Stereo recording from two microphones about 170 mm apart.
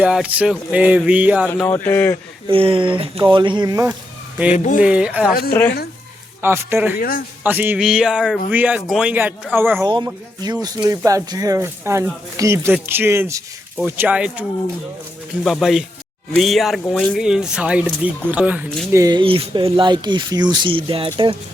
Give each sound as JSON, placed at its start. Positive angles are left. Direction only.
{"t": 0.0, "sound": "speech", "side_deg": -5}
{"t": 1.6, "sound": "speech", "side_deg": 15}
{"t": 2.5, "sound": "speech", "side_deg": -30}
{"t": 4.5, "sound": "speech", "side_deg": 45}
{"t": 4.8, "sound": "speech", "side_deg": -5}
{"t": 5.3, "sound": "a woman's voice", "side_deg": 65}
{"t": 6.4, "sound": "speech", "side_deg": -15}
{"t": 9.8, "sound": "speech", "side_deg": -25}
{"t": 15.4, "sound": "speech", "side_deg": 0}
{"t": 18.9, "sound": "speech", "side_deg": -20}